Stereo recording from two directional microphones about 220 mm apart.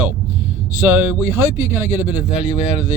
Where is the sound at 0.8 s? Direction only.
10° right (ahead or behind).